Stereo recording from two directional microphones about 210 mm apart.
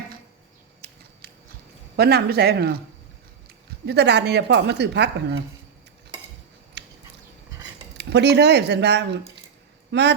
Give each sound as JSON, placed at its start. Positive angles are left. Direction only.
{"t": 0.8, "sound": "a sound", "side_deg": -50}
{"t": 2.0, "sound": "a woman's voice", "side_deg": -50}
{"t": 3.8, "sound": "a woman's voice", "side_deg": -50}
{"t": 6.8, "sound": "chewing", "side_deg": -55}
{"t": 7.9, "sound": "a woman's voice", "side_deg": -55}